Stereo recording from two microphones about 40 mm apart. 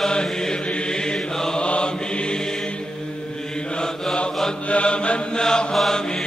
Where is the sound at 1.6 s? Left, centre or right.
Left.